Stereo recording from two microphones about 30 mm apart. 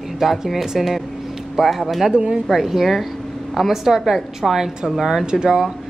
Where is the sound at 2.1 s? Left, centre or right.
Right.